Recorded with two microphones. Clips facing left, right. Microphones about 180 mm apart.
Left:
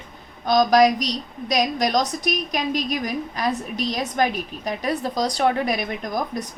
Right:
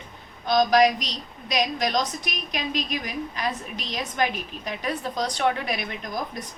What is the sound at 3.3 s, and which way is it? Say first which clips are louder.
A woman's voice: left 5 dB; 40° left (ahead or behind).